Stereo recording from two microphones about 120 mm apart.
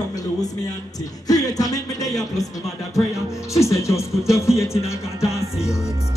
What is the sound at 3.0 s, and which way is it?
Music, 30° left (ahead or behind).